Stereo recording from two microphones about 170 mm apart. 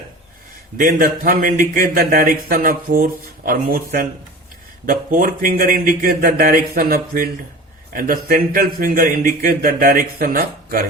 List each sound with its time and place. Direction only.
0.8 s speech: 55° right (ahead or behind)